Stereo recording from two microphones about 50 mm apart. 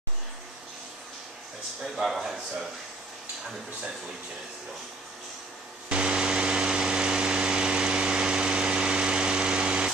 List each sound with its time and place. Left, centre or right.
2.0 s speech: centre
5.9 s vehicle: centre